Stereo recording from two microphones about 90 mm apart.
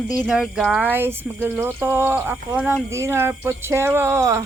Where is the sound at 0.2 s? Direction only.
10° right (ahead or behind).